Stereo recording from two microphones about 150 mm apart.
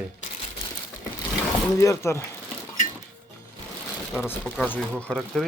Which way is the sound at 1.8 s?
20° left (ahead or behind).